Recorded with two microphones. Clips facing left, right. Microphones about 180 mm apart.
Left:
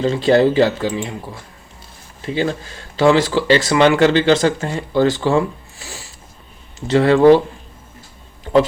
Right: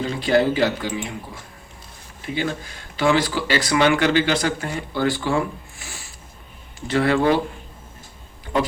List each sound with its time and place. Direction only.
0.0 s speech: 30° left (ahead or behind)
2.2 s speech: 30° left (ahead or behind)